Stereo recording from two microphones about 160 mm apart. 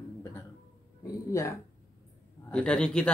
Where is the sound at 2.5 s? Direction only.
5° left (ahead or behind).